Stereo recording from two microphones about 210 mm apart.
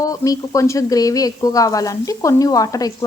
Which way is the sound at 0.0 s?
15° left (ahead or behind).